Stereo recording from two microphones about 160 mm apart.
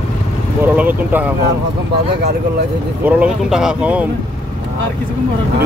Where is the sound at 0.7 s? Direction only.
10° right (ahead or behind).